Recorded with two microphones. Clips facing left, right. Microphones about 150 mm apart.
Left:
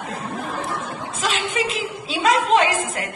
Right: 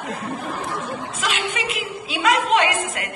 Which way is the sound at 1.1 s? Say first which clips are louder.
Left 4 dB; 35° left (ahead or behind).